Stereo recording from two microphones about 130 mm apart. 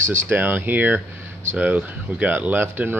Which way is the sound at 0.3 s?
15° right (ahead or behind).